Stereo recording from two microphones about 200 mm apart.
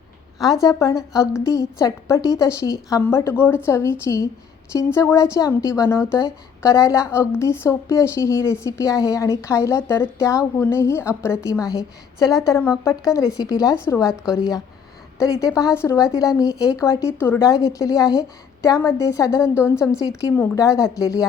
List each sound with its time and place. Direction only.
0.3 s a woman's voice: centre (ahead or behind)
0.6 s a woman's voice: 15° left (ahead or behind)
14.1 s a woman's voice: 5° right (ahead or behind)
15.7 s a woman's voice: 15° left (ahead or behind)